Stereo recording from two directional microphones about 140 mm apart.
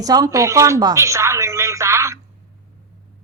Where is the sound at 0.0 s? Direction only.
25° right (ahead or behind).